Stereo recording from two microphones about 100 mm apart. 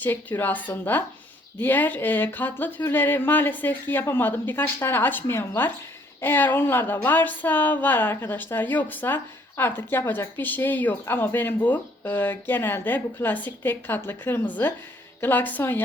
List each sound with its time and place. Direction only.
0.0 s speech: 20° left (ahead or behind)